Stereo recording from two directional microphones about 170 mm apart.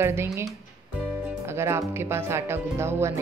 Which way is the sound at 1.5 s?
15° right (ahead or behind).